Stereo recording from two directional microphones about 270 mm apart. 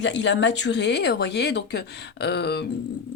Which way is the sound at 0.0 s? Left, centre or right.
Left.